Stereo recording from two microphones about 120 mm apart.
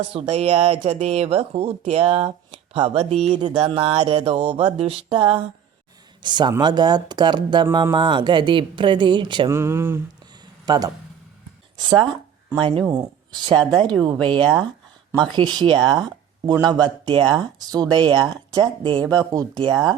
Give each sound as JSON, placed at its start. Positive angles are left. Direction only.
{"t": 0.1, "sound": "speech", "side_deg": -55}
{"t": 3.6, "sound": "speech", "side_deg": -50}
{"t": 4.0, "sound": "a sound", "side_deg": -50}
{"t": 6.2, "sound": "speech", "side_deg": -40}
{"t": 9.5, "sound": "speech", "side_deg": -20}
{"t": 10.7, "sound": "speech", "side_deg": -35}
{"t": 12.5, "sound": "a sound", "side_deg": -50}
{"t": 13.7, "sound": "speech", "side_deg": -40}
{"t": 14.0, "sound": "a sound", "side_deg": -40}
{"t": 15.1, "sound": "speech", "side_deg": -35}
{"t": 19.1, "sound": "speech", "side_deg": -30}